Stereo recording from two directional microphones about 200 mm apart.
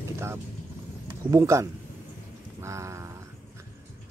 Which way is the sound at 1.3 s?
15° right (ahead or behind).